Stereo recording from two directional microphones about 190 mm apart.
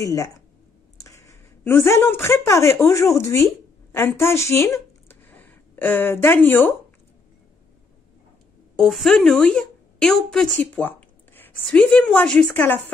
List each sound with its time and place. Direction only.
0.0 s a woman's voice: 15° left (ahead or behind)
5.0 s a sound: 10° left (ahead or behind)
8.7 s speech: centre (ahead or behind)